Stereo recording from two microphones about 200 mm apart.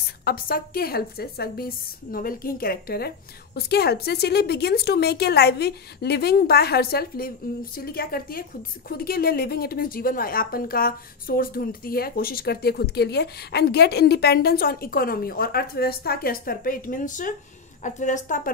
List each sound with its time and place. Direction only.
0.2 s a woman's voice: 45° left (ahead or behind)